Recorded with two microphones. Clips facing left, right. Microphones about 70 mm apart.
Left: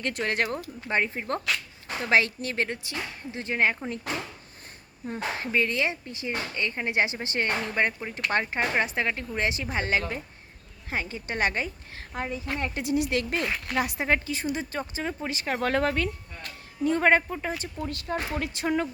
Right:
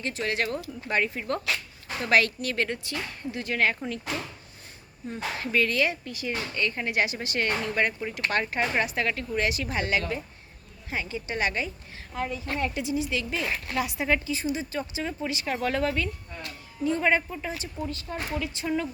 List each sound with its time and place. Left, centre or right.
0.0 s speech: left
0.4 s a woman's voice: left
12.2 s speech: left
12.8 s speech: left